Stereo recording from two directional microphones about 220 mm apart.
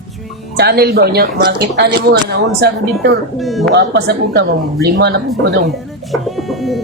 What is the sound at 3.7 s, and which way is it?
Speech, 50° right (ahead or behind).